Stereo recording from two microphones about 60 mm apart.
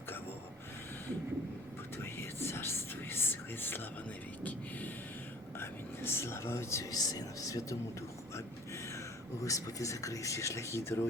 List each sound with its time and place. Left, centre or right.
2.1 s a sound: left
5.5 s speech: left
6.9 s speech: left
9.4 s speech: left